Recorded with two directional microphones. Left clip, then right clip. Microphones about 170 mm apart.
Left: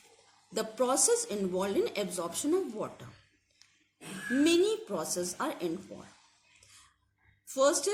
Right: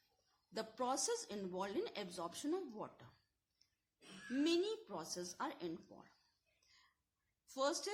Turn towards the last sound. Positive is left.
turn(degrees=-40)  # may be behind; listen again after turning